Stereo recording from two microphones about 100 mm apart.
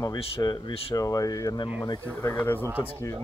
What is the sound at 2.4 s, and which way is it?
Speech, 20° left (ahead or behind).